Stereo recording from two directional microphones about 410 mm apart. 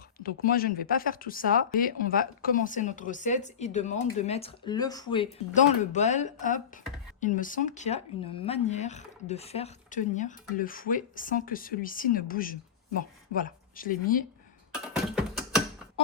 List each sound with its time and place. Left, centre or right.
0.2 s speech: left
15.1 s mechanisms: centre